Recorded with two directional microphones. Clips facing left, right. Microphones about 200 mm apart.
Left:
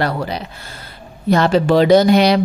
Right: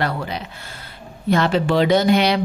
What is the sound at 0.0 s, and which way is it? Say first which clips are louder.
Speech: left 4 dB; 35° left (ahead or behind).